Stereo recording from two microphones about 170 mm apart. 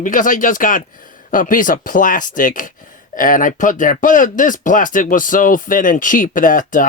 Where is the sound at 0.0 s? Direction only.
50° left (ahead or behind).